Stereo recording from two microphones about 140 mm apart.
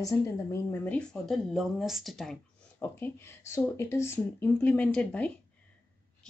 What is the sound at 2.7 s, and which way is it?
Speech, 15° left (ahead or behind).